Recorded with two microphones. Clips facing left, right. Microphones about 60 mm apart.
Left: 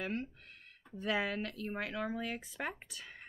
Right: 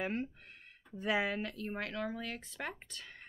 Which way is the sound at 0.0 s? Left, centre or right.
Centre.